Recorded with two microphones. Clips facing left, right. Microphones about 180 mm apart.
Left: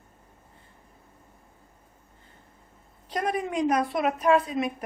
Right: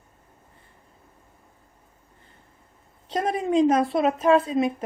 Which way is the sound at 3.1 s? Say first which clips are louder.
Right 4 dB; 25° right (ahead or behind).